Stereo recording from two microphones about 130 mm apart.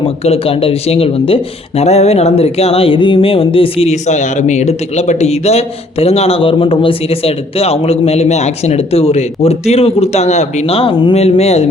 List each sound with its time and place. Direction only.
0.3 s speech: 45° left (ahead or behind)